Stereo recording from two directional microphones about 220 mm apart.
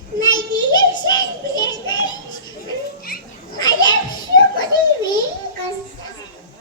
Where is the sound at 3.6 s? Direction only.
20° left (ahead or behind).